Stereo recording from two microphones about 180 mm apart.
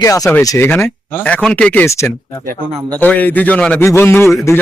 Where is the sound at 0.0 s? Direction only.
20° left (ahead or behind).